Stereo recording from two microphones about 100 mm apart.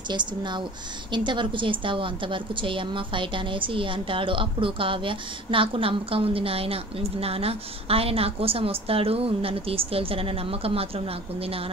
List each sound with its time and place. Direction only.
0.1 s a woman's voice: 50° right (ahead or behind); by 10.9 s 75° right (ahead or behind)